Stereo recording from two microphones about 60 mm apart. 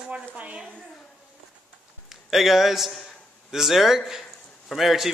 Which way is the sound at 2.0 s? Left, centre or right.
Centre.